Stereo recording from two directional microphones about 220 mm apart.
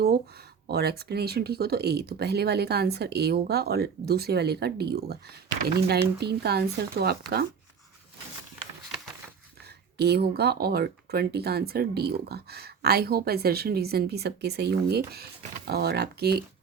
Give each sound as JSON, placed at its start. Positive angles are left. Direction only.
{"t": 0.0, "sound": "speech", "side_deg": -45}
{"t": 9.6, "sound": "speech", "side_deg": -45}